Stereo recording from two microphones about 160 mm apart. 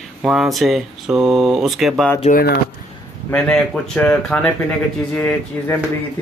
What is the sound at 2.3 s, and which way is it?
Speech, 80° left.